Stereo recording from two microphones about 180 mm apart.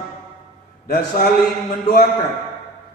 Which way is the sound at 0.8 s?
55° left (ahead or behind).